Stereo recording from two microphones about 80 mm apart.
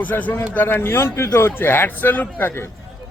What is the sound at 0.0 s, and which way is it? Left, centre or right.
A man's voice, centre.